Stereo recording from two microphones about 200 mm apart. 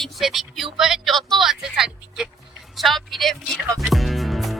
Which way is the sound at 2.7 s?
Centre (ahead or behind).